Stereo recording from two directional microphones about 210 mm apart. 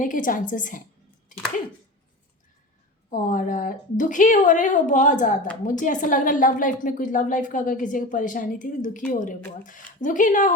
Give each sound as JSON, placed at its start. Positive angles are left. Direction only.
{"t": 0.0, "sound": "a woman's voice", "side_deg": 40}
{"t": 1.3, "sound": "a sound", "side_deg": 40}
{"t": 3.1, "sound": "a woman's voice", "side_deg": 40}